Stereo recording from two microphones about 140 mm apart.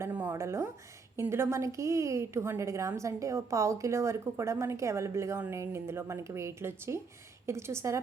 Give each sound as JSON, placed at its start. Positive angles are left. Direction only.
{"t": 0.0, "sound": "a woman's voice", "side_deg": -10}